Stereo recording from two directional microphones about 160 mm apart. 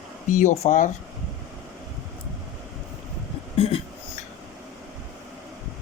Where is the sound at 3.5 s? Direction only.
35° left (ahead or behind).